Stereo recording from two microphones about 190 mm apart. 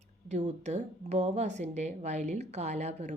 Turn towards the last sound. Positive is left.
turn(degrees=-35)  # may be behind; listen again after turning